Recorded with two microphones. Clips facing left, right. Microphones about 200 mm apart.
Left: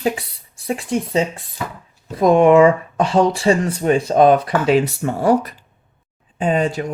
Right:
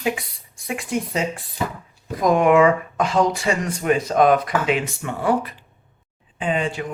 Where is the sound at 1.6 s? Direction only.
25° right (ahead or behind).